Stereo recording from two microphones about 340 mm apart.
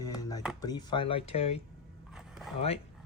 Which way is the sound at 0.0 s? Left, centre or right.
Centre.